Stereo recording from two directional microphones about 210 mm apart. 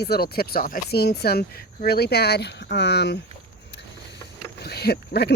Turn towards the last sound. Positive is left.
turn(degrees=50)  # may be behind; listen again after turning